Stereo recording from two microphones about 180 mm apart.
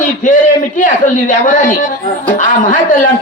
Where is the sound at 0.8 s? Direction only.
45° left (ahead or behind).